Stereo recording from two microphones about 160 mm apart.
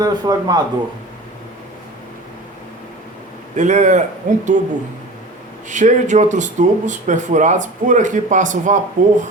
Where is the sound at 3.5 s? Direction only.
50° right (ahead or behind).